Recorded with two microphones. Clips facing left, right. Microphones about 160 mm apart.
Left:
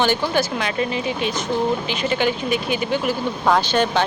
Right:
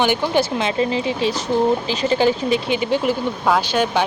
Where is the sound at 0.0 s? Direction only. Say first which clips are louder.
Right 2 dB; 20° right (ahead or behind).